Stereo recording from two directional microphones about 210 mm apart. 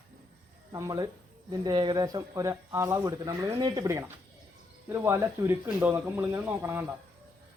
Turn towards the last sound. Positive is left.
turn(degrees=-10)  # may be behind; listen again after turning